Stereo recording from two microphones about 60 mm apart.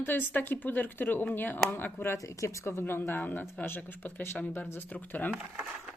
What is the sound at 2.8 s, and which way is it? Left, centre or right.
Speech, left.